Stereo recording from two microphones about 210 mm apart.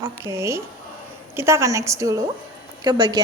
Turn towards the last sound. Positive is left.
turn(degrees=-20)  # may be behind; listen again after turning